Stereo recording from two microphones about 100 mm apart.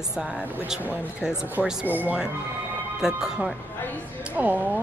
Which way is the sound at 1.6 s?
15° right (ahead or behind).